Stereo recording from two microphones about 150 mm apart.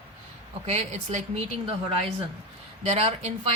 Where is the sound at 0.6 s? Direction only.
45° right (ahead or behind).